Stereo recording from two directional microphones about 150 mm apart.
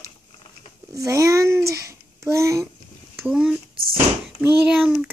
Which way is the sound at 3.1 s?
5° right (ahead or behind).